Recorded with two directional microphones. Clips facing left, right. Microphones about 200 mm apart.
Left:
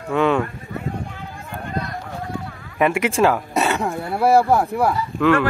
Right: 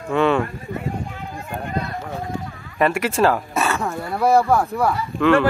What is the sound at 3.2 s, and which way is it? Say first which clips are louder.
Speech: even; 10° left (ahead or behind).